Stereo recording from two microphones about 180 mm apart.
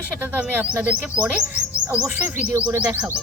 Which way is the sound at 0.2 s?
10° right (ahead or behind).